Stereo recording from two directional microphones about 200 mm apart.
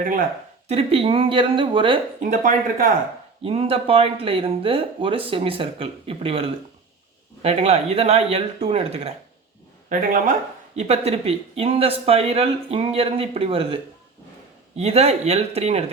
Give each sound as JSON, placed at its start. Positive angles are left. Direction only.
{"t": 0.0, "sound": "speech", "side_deg": -40}
{"t": 0.7, "sound": "speech", "side_deg": -30}
{"t": 2.3, "sound": "speech", "side_deg": -40}
{"t": 3.4, "sound": "speech", "side_deg": -30}
{"t": 9.9, "sound": "speech", "side_deg": -40}
{"t": 14.8, "sound": "speech", "side_deg": -30}